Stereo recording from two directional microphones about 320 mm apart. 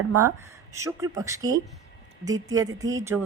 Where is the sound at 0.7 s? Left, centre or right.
Centre.